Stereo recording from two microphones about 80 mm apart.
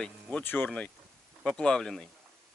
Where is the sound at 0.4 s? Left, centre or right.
Left; by 2.0 s centre.